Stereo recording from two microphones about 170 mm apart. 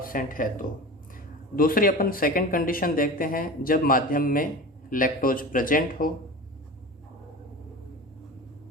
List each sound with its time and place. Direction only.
0.0 s speech: 55° left (ahead or behind)